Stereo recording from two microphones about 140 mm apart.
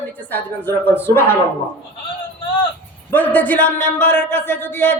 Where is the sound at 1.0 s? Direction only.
15° left (ahead or behind).